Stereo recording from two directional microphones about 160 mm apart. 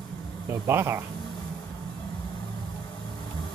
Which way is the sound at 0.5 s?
15° right (ahead or behind).